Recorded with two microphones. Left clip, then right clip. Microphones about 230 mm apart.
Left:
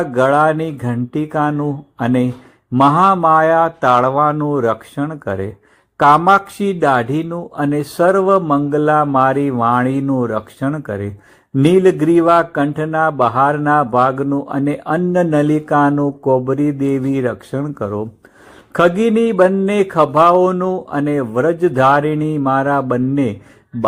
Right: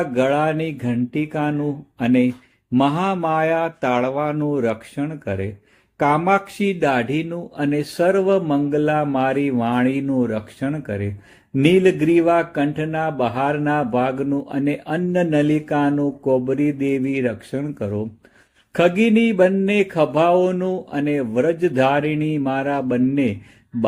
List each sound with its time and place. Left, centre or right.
0.0 s speech: centre
16.8 s speech: left
17.2 s speech: centre